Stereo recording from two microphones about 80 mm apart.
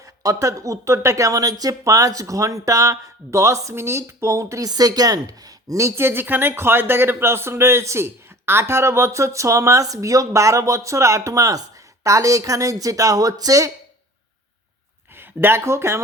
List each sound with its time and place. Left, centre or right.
0.0 s speech: right
4.7 s a woman's voice: right
15.1 s speech: right